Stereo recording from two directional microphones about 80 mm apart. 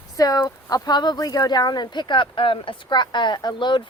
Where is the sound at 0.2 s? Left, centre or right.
Left.